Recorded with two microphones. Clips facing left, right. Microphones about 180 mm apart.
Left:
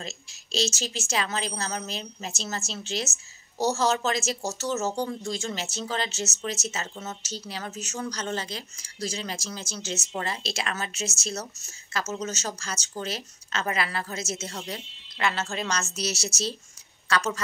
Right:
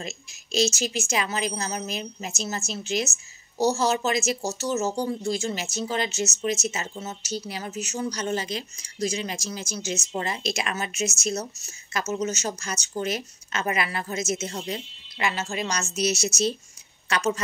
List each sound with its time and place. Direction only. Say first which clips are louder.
0.0 s a woman's voice: right 3 dB; 10° right (ahead or behind)